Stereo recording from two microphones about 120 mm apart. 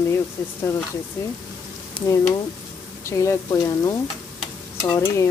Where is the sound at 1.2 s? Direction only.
25° left (ahead or behind).